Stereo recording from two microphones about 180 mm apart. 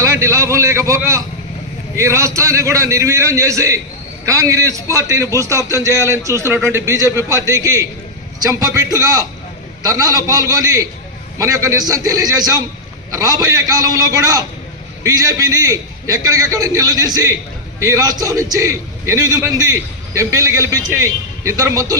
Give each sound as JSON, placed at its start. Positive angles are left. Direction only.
{"t": 0.0, "sound": "a man's voice", "side_deg": -15}